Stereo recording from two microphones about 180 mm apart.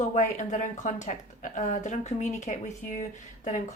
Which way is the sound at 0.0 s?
40° left (ahead or behind).